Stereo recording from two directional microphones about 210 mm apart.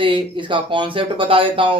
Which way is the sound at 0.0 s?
25° right (ahead or behind).